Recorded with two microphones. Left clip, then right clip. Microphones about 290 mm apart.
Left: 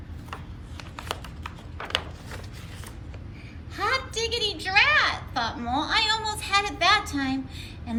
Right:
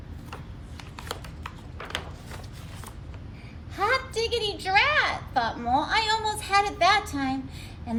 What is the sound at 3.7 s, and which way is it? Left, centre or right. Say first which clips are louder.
A woman's voice: right 1 dB; centre.